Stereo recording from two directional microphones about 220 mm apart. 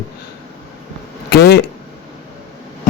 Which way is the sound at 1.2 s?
45° left (ahead or behind).